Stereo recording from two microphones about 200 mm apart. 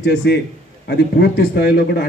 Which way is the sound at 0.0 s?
55° left (ahead or behind).